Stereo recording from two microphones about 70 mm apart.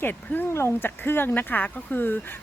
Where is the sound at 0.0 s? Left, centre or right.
Left.